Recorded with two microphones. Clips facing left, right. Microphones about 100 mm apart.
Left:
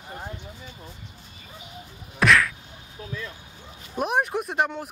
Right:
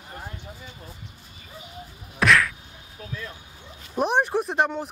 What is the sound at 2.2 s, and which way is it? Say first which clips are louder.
Whack: even; centre (ahead or behind).